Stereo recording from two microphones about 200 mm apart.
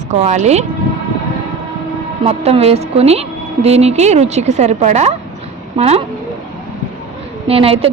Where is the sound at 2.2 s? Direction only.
30° right (ahead or behind).